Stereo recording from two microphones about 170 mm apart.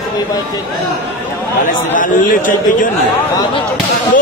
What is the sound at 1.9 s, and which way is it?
Speech, 50° left (ahead or behind).